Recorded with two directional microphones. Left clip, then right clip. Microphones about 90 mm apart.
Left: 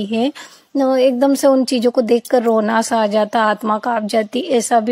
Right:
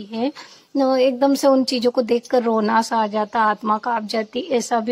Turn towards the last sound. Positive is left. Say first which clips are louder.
# left 5 dB
turn(degrees=35)  # may be behind; listen again after turning